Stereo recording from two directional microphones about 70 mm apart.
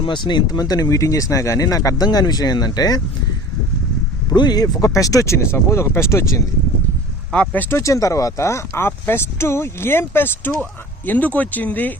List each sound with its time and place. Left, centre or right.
0.1 s speech: left
0.9 s speech: left
4.4 s speech: left
4.8 s speech: left
7.3 s speech: left
7.8 s speech: left